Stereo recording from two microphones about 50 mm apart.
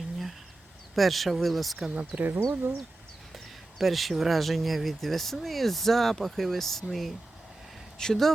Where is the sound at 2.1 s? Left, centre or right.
Right.